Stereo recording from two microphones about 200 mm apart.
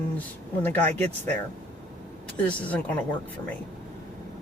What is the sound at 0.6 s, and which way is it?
Speech, 10° left (ahead or behind).